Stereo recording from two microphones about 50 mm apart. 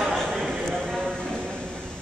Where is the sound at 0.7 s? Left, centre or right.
Centre.